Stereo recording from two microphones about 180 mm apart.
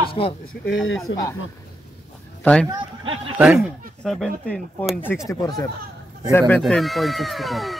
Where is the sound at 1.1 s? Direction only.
90° left.